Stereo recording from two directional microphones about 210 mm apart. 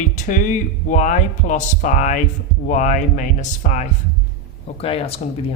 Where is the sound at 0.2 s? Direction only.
35° left (ahead or behind).